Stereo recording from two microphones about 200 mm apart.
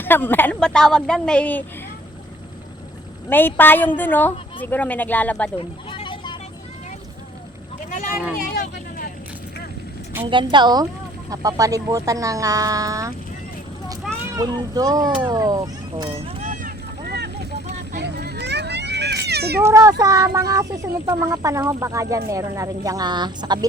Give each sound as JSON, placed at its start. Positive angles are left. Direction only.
{"t": 0.0, "sound": "a woman's voice", "side_deg": 10}
{"t": 3.2, "sound": "a woman's voice", "side_deg": 10}
{"t": 5.5, "sound": "a sound", "side_deg": 25}
{"t": 7.9, "sound": "a sound", "side_deg": 40}
{"t": 10.2, "sound": "speech", "side_deg": -25}
{"t": 14.3, "sound": "speech", "side_deg": -20}
{"t": 16.4, "sound": "vehicle", "side_deg": -40}
{"t": 19.6, "sound": "speech", "side_deg": -15}